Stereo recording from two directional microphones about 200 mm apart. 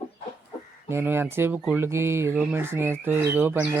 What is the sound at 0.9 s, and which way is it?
Speech, 10° right (ahead or behind).